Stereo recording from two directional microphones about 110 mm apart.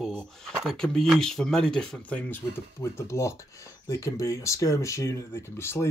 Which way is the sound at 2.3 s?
25° left (ahead or behind).